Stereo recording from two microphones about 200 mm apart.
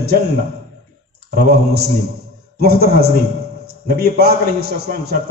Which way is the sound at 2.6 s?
50° right (ahead or behind).